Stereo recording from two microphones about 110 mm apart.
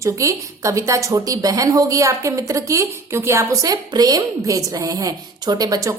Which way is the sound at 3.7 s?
35° right (ahead or behind).